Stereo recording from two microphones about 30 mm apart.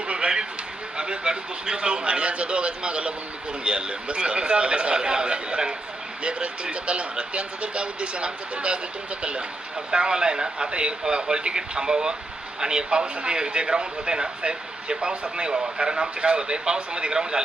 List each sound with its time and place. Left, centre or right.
0.1 s a sound: right
0.9 s speech: right
9.9 s speech: right
10.7 s speech: right
11.0 s speech: right